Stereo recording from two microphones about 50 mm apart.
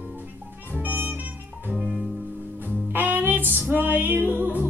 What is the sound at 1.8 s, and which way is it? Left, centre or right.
Music, centre.